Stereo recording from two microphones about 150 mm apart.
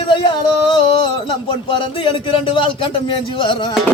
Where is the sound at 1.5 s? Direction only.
35° left (ahead or behind).